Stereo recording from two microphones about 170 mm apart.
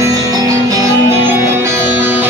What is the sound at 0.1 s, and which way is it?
Music, 20° right (ahead or behind).